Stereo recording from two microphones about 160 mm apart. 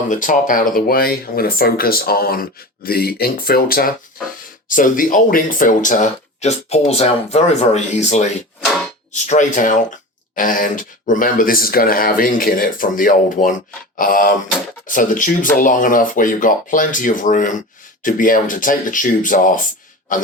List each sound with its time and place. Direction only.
0.1 s speech: 55° left (ahead or behind)
4.1 s a sound: 60° left (ahead or behind)
4.7 s speech: 55° left (ahead or behind)